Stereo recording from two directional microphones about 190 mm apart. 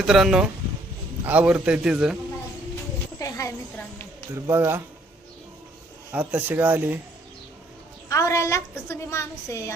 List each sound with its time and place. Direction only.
0.0 s a man's voice: centre (ahead or behind)
3.2 s a sound: 20° left (ahead or behind)
4.4 s speech: 15° right (ahead or behind)
6.1 s speech: 10° right (ahead or behind)
8.1 s a woman's voice: 15° left (ahead or behind)